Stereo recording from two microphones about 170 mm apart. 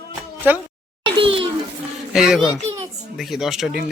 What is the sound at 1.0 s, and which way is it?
Speech, 30° right (ahead or behind).